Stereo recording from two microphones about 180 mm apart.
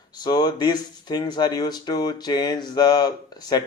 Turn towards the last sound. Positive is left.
turn(degrees=20)  # may be behind; listen again after turning